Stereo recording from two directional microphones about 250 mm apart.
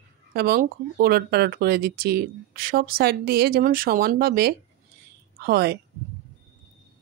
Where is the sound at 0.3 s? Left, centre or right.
Right.